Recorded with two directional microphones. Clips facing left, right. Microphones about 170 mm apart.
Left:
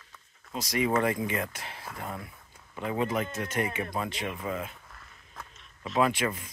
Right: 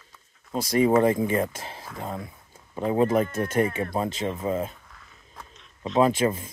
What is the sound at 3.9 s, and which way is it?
Speech, 25° right (ahead or behind).